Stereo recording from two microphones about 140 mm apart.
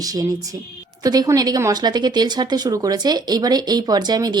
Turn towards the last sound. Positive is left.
turn(degrees=-30)  # may be behind; listen again after turning